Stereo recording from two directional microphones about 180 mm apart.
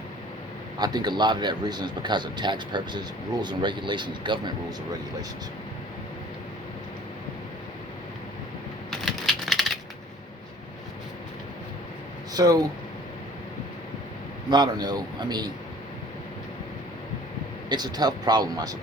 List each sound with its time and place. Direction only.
0.8 s a man's voice: 25° right (ahead or behind)
8.9 s typing: centre (ahead or behind)
12.3 s speech: 20° right (ahead or behind)
14.5 s a man's voice: 25° right (ahead or behind)
17.7 s a man's voice: 25° right (ahead or behind)